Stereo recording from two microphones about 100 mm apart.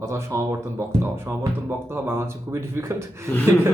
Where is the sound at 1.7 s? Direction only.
20° right (ahead or behind).